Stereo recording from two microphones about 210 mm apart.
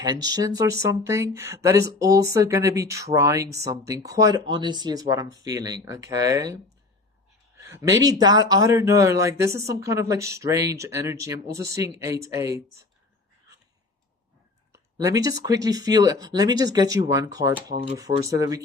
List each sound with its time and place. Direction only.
0.0 s speech: 20° right (ahead or behind)
7.6 s speech: 15° right (ahead or behind)
14.9 s speech: 15° right (ahead or behind)